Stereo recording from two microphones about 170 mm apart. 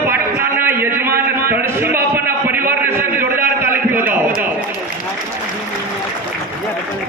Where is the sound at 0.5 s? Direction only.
15° right (ahead or behind).